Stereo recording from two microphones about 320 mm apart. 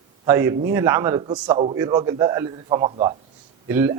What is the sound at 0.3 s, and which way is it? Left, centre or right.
A man's voice, centre.